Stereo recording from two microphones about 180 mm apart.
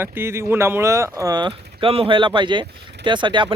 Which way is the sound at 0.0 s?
10° right (ahead or behind).